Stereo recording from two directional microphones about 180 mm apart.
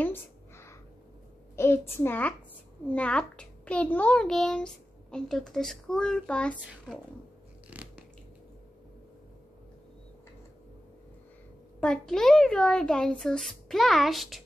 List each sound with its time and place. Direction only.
0.0 s a sound: 15° left (ahead or behind)
1.6 s a child's voice: 15° left (ahead or behind)
7.7 s biting: 10° right (ahead or behind)
11.8 s a child's voice: 5° left (ahead or behind)